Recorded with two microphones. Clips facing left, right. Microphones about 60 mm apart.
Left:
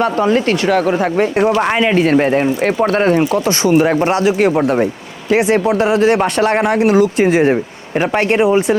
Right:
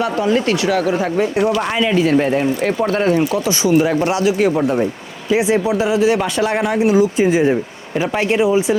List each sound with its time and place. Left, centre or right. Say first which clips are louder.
0.0 s speech: left 3 dB; left